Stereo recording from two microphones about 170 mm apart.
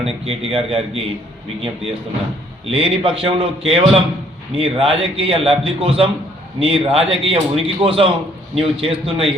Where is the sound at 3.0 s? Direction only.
35° right (ahead or behind).